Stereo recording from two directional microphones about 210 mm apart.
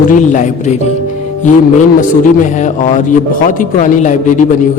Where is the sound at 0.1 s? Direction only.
35° left (ahead or behind).